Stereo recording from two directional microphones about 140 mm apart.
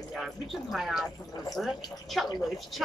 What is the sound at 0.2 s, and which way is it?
A woman's voice, centre (ahead or behind).